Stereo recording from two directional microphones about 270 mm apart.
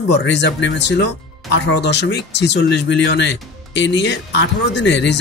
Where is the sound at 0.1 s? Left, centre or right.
Left.